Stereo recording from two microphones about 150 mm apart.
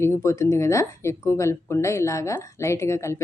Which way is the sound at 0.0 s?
20° left (ahead or behind).